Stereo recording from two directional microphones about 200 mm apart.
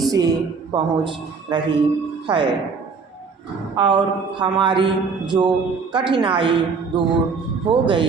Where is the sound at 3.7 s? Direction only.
25° right (ahead or behind).